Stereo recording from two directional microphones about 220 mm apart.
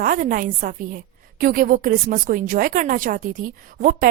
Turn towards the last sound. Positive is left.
turn(degrees=-40)  # may be behind; listen again after turning